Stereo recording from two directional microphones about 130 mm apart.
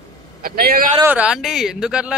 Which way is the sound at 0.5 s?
90° right.